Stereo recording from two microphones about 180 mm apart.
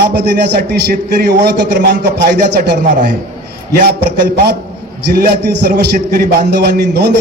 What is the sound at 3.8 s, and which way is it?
A man's voice, 65° right (ahead or behind).